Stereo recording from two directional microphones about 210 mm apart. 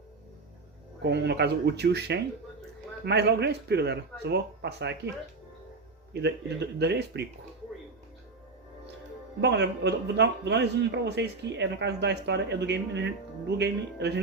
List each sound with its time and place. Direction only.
1.0 s speech: 50° right (ahead or behind)
6.2 s speech: 55° right (ahead or behind)
9.4 s speech: 55° right (ahead or behind)